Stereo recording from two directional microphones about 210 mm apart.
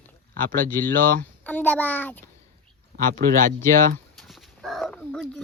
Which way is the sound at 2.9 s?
40° right (ahead or behind).